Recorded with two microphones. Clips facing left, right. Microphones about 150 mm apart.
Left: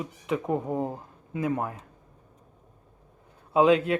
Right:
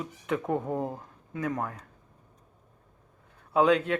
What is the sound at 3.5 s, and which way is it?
Speech, 15° left (ahead or behind).